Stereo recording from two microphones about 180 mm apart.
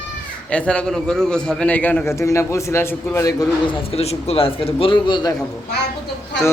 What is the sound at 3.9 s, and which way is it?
A man's voice, 35° left (ahead or behind).